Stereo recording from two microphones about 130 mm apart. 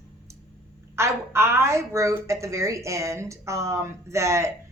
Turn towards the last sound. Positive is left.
turn(degrees=-20)  # may be behind; listen again after turning